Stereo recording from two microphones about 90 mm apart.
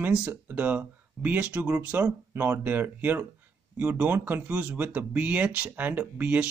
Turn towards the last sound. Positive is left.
turn(degrees=-20)  # may be behind; listen again after turning